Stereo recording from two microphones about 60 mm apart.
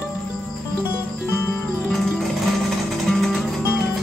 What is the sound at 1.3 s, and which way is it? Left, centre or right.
Music, left.